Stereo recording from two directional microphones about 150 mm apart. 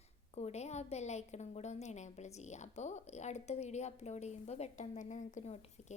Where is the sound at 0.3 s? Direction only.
45° left (ahead or behind).